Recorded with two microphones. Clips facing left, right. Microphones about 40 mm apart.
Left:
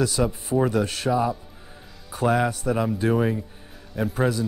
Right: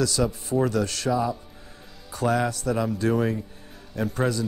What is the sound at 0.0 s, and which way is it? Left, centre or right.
Speech, left.